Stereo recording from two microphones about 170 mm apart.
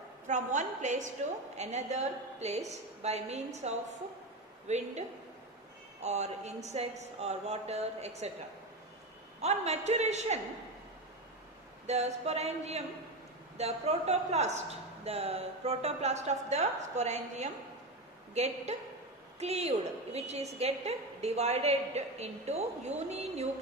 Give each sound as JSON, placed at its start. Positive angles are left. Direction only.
{"t": 0.3, "sound": "a woman's voice", "side_deg": -45}
{"t": 6.0, "sound": "a woman's voice", "side_deg": -40}
{"t": 9.4, "sound": "a woman's voice", "side_deg": -40}
{"t": 11.9, "sound": "a woman's voice", "side_deg": -40}